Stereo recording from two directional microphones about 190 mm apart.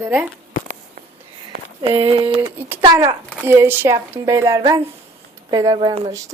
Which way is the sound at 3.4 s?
10° right (ahead or behind).